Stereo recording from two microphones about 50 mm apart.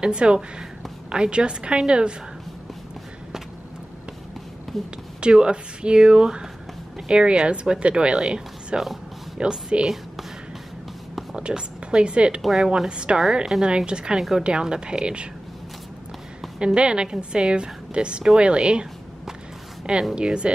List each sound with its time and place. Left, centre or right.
0.0 s a woman's voice: centre
4.7 s speech: centre
5.2 s a woman's voice: centre
11.3 s speech: centre
12.4 s a woman's voice: centre
16.5 s a woman's voice: centre
19.9 s a woman's voice: centre